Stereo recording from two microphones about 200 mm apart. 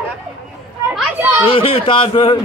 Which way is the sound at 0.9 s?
5° right (ahead or behind).